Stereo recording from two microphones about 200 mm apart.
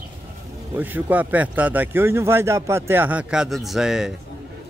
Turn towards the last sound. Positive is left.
turn(degrees=-5)  # may be behind; listen again after turning